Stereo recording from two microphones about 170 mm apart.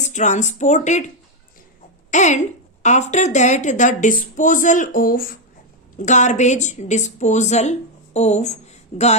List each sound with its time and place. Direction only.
0.0 s a woman's voice: 45° left (ahead or behind)
6.0 s a woman's voice: 45° left (ahead or behind)